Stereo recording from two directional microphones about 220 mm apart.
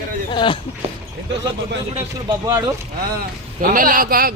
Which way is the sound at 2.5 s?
15° right (ahead or behind).